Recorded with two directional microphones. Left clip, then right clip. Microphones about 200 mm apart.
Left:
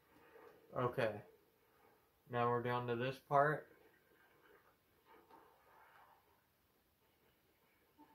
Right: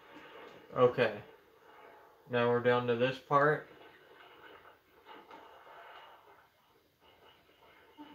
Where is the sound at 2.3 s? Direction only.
55° left (ahead or behind).